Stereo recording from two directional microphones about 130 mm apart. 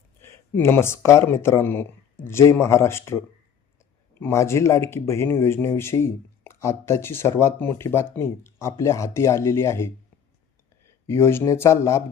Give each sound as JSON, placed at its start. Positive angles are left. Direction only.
{"t": 0.2, "sound": "speech", "side_deg": 20}